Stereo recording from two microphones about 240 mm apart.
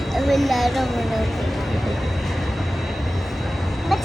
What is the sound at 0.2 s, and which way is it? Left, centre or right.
Speech, centre.